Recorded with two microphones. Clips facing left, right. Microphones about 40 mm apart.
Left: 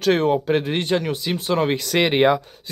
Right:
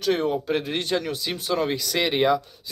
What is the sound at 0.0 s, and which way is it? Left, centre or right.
Speech, left.